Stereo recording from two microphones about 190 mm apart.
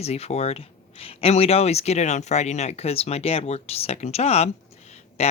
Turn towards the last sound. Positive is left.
turn(degrees=35)  # may be behind; listen again after turning